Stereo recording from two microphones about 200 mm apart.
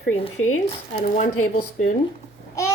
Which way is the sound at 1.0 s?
40° left (ahead or behind).